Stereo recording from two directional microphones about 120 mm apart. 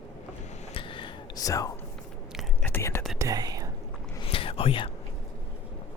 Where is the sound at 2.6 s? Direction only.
20° left (ahead or behind).